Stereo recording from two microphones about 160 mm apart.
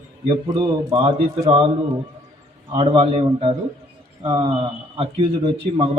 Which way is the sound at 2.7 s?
30° right (ahead or behind).